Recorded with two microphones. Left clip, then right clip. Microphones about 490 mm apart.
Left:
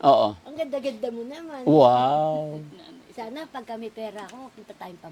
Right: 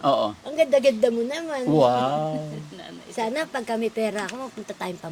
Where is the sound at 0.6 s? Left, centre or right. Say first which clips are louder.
Right 12 dB; right.